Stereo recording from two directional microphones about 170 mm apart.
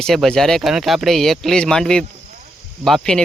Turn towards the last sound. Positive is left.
turn(degrees=5)  # may be behind; listen again after turning